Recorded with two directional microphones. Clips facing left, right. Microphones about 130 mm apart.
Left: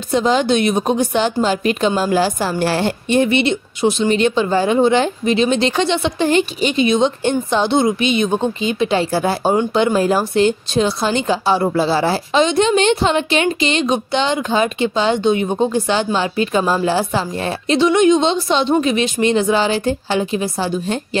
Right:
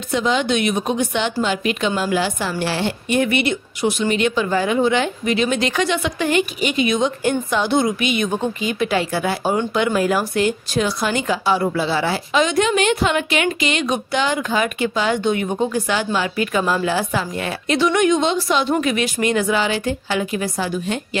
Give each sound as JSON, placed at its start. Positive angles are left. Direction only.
{"t": 0.1, "sound": "a woman's voice", "side_deg": 35}
{"t": 3.1, "sound": "a woman's voice", "side_deg": 25}